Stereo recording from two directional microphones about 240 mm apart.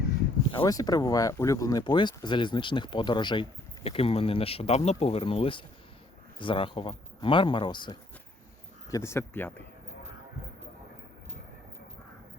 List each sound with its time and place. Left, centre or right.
0.5 s speech: centre